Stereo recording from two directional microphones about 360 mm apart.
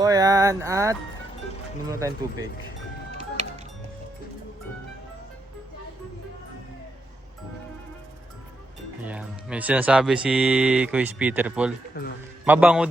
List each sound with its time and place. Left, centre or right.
0.0 s music: centre
1.9 s speech: centre
9.0 s speech: centre
12.0 s a man's voice: left
12.5 s speech: centre